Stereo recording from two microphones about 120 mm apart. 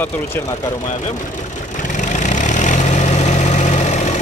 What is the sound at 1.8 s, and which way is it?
Vehicle, 90° left.